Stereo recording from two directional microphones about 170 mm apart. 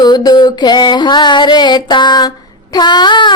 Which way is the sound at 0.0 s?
25° left (ahead or behind).